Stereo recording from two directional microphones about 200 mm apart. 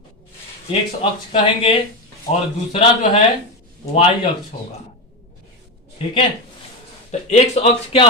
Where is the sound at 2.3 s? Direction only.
30° left (ahead or behind).